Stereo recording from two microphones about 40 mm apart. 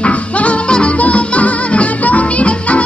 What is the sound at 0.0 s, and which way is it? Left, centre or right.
Music, left.